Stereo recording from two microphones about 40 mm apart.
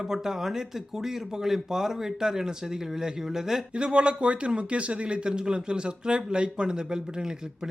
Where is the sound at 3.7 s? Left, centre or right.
Right.